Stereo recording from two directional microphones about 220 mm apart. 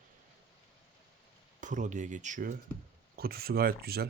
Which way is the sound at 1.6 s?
35° right (ahead or behind).